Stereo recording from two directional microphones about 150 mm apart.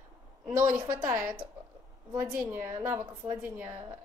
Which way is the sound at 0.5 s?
20° right (ahead or behind).